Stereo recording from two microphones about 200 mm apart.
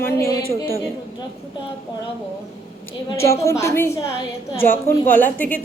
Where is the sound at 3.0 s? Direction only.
15° left (ahead or behind).